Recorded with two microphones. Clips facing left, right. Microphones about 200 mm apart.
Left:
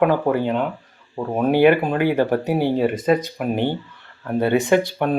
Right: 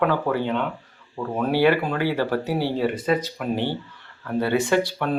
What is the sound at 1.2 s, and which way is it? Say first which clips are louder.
Speech: left 5 dB; 20° left (ahead or behind).